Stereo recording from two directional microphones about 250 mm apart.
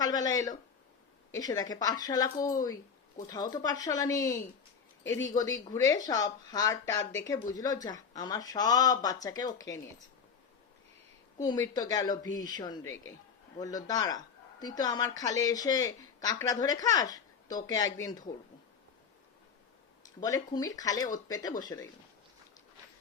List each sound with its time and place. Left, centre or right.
0.0 s speech: centre
11.3 s speech: centre
20.2 s speech: centre